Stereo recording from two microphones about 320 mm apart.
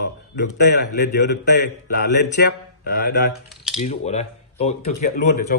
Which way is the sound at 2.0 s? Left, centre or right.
Left.